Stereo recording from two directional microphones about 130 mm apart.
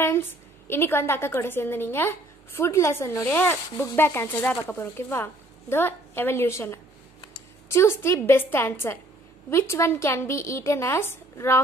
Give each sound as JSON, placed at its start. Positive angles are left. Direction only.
{"t": 0.0, "sound": "a woman's voice", "side_deg": 20}